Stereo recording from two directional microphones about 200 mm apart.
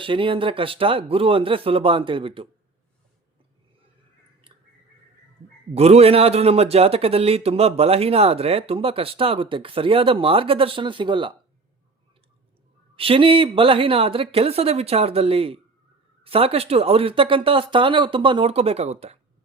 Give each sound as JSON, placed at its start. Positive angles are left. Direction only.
{"t": 0.0, "sound": "a man's voice", "side_deg": -25}
{"t": 5.7, "sound": "a man's voice", "side_deg": -30}
{"t": 13.0, "sound": "a man's voice", "side_deg": -25}